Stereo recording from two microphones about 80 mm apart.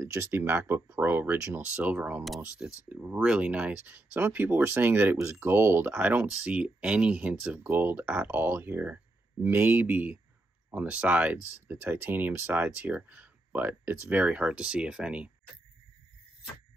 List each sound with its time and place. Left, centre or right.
0.0 s speech: right; by 15.3 s centre